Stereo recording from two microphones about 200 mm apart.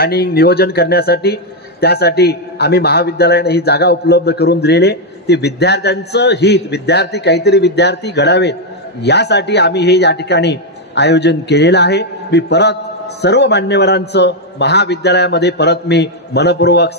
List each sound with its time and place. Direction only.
0.0 s a man's voice: 50° left (ahead or behind)